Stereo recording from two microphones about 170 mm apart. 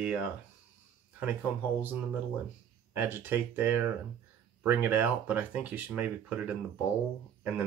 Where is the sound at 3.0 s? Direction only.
10° right (ahead or behind).